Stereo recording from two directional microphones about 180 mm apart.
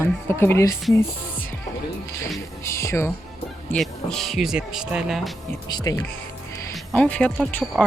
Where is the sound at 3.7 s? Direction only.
Centre (ahead or behind).